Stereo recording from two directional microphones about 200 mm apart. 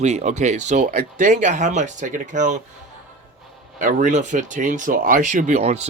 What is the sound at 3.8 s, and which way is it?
Speech, 40° right (ahead or behind).